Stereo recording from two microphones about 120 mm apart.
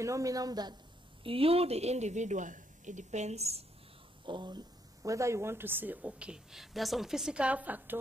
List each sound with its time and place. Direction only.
0.0 s a woman's voice: 25° right (ahead or behind)
1.2 s speech: 50° right (ahead or behind)
4.3 s a woman's voice: 40° right (ahead or behind); by 8.0 s 15° right (ahead or behind)